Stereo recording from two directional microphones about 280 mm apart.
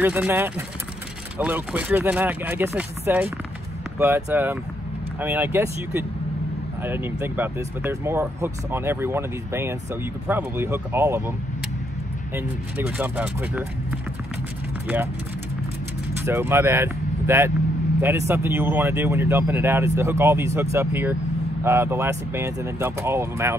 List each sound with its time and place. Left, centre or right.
0.0 s speech: centre
12.4 s speech: centre
16.3 s speech: centre